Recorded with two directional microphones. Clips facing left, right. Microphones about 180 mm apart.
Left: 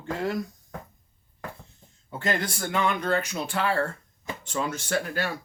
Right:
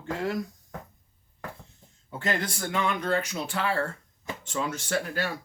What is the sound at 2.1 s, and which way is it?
Speech, 40° left (ahead or behind).